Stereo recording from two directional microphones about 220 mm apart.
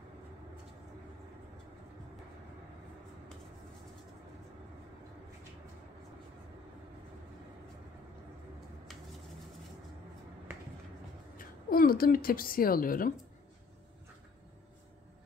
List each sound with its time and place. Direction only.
11.3 s a woman's voice: 40° left (ahead or behind)